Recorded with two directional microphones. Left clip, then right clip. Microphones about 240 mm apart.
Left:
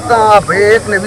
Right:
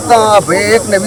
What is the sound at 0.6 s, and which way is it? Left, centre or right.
Speech, right.